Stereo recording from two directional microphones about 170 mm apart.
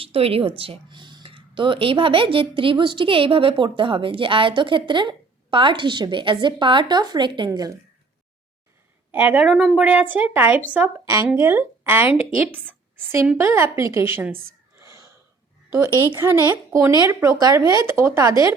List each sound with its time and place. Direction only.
0.0 s speech: 35° right (ahead or behind)
9.1 s a woman's voice: 10° right (ahead or behind)
11.0 s a woman's voice: 20° right (ahead or behind)
14.8 s a sound: 20° right (ahead or behind)
15.7 s a woman's voice: 15° right (ahead or behind)